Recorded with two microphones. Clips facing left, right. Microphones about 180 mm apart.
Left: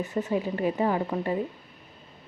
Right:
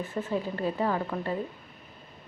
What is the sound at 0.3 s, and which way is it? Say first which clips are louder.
A woman's voice: left 2 dB; 15° left (ahead or behind).